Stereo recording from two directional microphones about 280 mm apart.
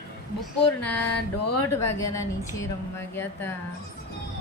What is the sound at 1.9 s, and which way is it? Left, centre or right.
Speech, centre.